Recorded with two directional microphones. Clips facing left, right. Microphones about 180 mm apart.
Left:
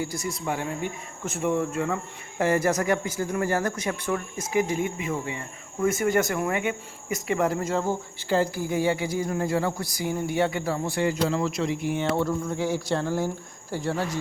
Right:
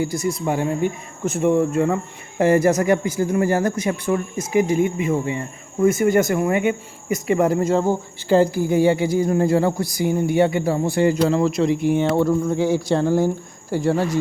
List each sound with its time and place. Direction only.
0.0 s speech: 20° right (ahead or behind)
5.8 s speech: 15° right (ahead or behind); by 9.8 s 30° right (ahead or behind)
10.0 s speech: 20° right (ahead or behind)
11.2 s a man's voice: 40° right (ahead or behind)
11.4 s speech: 25° right (ahead or behind)